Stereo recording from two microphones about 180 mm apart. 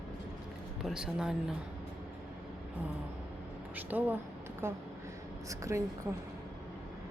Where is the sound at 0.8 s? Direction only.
5° right (ahead or behind).